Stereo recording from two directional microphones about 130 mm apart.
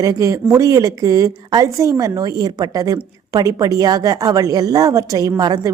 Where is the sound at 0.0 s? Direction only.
25° right (ahead or behind).